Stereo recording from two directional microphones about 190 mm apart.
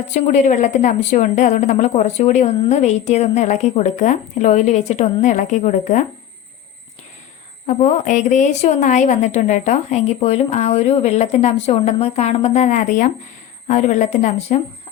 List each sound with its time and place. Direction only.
0.1 s a woman's voice: 40° left (ahead or behind)
7.7 s a woman's voice: 40° left (ahead or behind)